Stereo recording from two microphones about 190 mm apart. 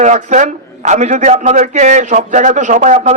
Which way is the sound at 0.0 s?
40° right (ahead or behind).